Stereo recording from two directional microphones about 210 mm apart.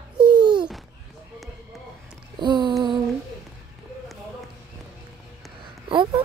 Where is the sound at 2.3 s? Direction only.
20° right (ahead or behind).